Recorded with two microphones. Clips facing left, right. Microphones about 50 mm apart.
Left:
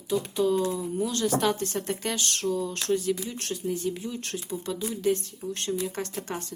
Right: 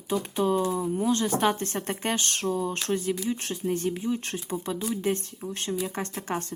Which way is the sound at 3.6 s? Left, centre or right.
Right.